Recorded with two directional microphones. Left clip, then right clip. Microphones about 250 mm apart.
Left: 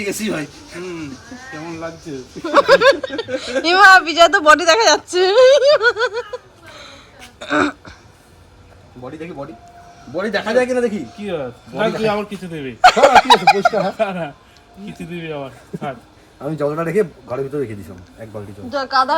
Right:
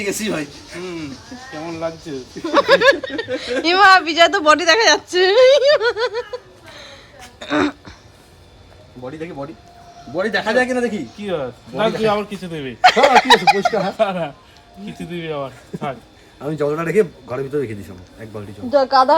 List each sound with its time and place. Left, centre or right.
0.0 s a man's voice: centre
0.8 s speech: right
2.0 s speech: centre
9.0 s a man's voice: centre
18.7 s speech: centre